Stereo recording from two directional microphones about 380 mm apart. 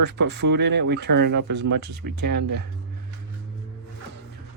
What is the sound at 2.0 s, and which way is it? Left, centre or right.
Speech, right.